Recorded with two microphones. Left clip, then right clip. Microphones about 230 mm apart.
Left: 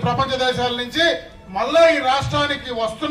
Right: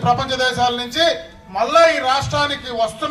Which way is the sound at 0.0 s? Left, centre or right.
Right.